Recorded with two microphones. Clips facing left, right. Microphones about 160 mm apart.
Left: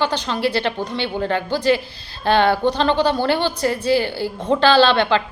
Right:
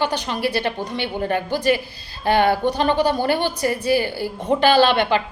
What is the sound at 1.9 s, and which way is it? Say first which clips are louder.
Speech: left 1 dB; 65° left (ahead or behind).